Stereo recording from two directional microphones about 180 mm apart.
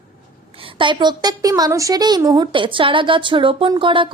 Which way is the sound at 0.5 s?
30° right (ahead or behind).